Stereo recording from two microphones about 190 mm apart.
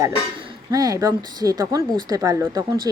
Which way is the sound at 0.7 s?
20° right (ahead or behind).